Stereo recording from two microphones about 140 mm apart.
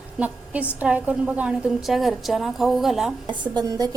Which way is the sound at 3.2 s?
35° right (ahead or behind).